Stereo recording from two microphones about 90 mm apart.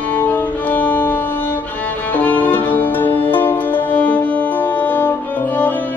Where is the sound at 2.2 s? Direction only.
20° left (ahead or behind).